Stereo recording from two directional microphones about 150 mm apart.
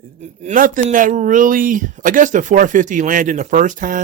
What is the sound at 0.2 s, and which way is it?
Speech, 60° right (ahead or behind).